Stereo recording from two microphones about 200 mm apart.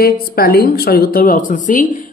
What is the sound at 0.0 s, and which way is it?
A man's voice, 50° left (ahead or behind).